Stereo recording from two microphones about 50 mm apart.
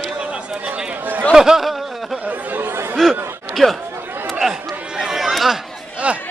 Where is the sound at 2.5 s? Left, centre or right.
Right.